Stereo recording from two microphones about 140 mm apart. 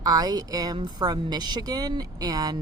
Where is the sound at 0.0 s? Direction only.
25° right (ahead or behind).